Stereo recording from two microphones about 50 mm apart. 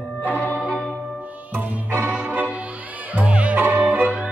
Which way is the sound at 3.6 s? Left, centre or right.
Right.